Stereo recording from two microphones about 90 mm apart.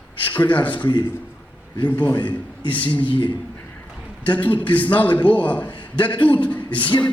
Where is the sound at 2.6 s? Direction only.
65° left (ahead or behind).